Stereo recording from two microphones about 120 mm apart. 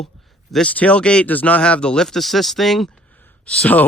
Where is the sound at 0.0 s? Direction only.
Centre (ahead or behind).